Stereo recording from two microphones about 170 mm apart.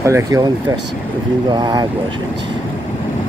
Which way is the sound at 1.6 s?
25° right (ahead or behind).